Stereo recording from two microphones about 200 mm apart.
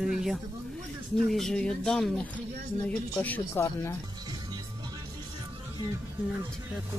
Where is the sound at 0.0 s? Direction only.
Centre (ahead or behind).